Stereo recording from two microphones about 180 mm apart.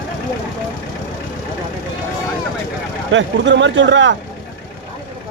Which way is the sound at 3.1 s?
90° right.